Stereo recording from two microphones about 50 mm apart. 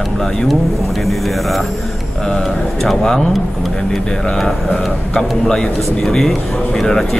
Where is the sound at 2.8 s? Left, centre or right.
Centre.